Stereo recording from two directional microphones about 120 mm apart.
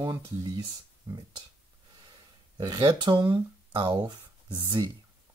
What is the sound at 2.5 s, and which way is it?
Speech, 35° right (ahead or behind).